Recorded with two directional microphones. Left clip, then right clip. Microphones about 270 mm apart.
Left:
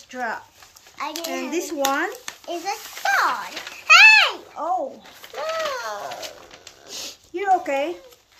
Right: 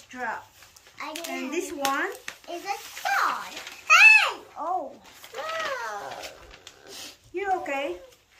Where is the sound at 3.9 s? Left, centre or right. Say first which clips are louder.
Left 4 dB; centre.